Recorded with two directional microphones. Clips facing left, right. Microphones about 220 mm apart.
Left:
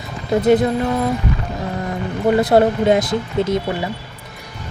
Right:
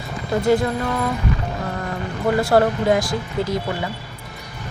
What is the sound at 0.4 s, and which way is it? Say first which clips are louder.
Speech: left 4 dB; 20° left (ahead or behind).